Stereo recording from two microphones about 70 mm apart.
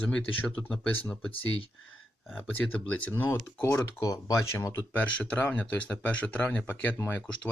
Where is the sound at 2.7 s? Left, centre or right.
Centre.